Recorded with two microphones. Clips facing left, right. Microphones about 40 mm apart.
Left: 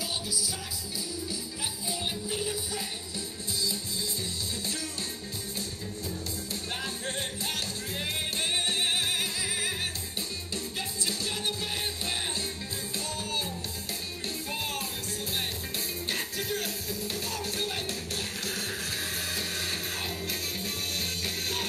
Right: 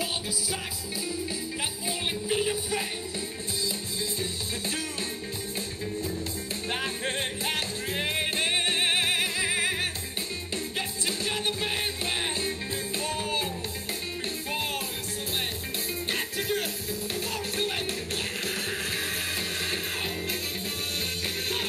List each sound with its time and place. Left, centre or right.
1.9 s music: right
6.7 s music: right
11.1 s music: right
16.1 s music: right